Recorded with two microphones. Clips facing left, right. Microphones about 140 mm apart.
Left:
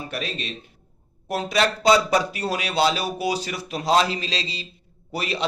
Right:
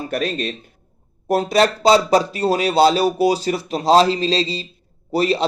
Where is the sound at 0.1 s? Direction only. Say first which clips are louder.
Right 8 dB; 45° right (ahead or behind).